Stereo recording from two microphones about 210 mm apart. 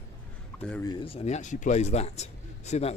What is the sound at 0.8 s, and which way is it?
A man's voice, 25° left (ahead or behind).